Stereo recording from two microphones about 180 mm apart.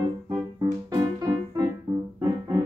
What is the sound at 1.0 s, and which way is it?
Music, 20° right (ahead or behind).